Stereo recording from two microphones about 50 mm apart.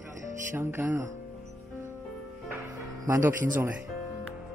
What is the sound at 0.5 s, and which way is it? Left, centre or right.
Speech, right.